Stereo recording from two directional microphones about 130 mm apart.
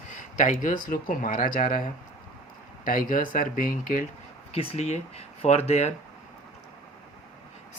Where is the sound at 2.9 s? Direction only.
90° left.